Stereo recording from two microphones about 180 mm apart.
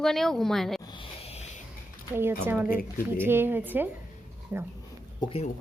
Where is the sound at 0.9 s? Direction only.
30° left (ahead or behind).